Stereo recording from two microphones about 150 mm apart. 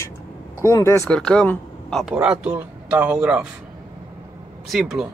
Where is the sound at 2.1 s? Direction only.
10° right (ahead or behind).